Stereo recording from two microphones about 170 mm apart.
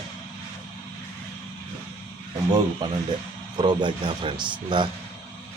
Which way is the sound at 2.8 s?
25° right (ahead or behind).